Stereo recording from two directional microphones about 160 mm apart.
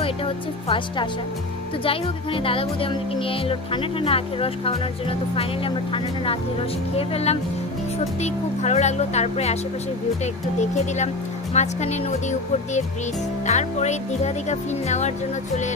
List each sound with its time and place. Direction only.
0.0 s speech: 35° left (ahead or behind)
7.0 s speech: 40° left (ahead or behind)
10.6 s speech: 45° left (ahead or behind)